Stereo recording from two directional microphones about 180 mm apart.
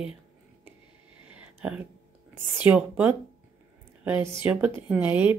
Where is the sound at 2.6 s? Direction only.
10° right (ahead or behind).